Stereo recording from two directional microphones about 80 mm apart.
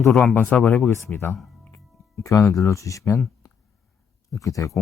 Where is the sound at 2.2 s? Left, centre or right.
Left.